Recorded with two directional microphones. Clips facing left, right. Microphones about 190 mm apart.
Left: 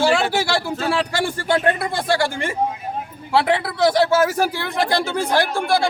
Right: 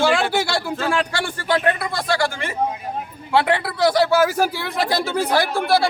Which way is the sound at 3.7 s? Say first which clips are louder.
Even; centre (ahead or behind).